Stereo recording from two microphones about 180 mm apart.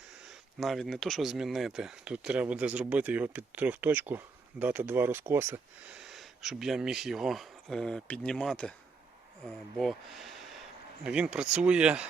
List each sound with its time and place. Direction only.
0.6 s speech: centre (ahead or behind)
6.0 s speech: centre (ahead or behind)
9.7 s speech: centre (ahead or behind)